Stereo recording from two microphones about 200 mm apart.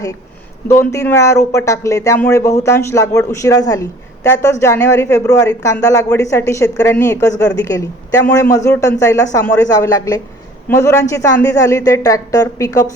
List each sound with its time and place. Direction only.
0.7 s speech: 15° left (ahead or behind)